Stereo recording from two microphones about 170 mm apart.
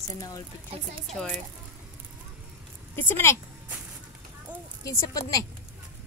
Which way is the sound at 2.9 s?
10° left (ahead or behind).